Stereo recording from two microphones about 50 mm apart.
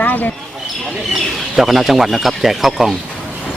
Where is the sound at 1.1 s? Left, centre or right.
Centre.